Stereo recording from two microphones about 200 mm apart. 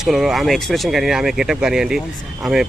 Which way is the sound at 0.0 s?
Centre (ahead or behind).